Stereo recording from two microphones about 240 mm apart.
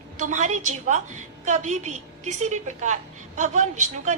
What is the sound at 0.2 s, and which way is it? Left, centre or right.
A woman's voice, right.